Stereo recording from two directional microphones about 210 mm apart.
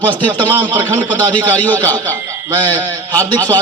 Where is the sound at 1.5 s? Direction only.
10° left (ahead or behind).